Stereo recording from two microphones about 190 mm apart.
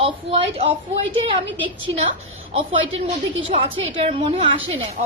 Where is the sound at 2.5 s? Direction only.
30° right (ahead or behind).